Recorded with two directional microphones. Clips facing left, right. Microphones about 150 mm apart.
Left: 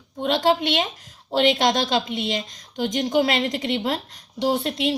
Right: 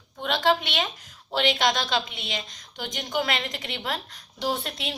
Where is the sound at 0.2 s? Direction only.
35° left (ahead or behind).